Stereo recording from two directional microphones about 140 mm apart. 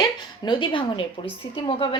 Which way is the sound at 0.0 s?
35° left (ahead or behind).